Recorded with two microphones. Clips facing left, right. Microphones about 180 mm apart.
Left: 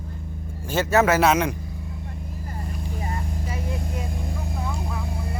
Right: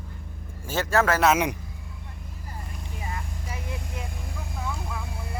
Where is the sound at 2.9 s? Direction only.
40° left (ahead or behind).